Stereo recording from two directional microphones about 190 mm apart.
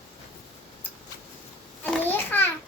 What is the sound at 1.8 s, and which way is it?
Babbling, 10° left (ahead or behind).